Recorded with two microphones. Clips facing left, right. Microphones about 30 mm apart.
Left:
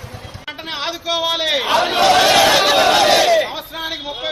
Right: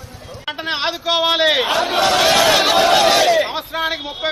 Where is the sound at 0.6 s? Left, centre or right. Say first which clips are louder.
Right 3 dB; right.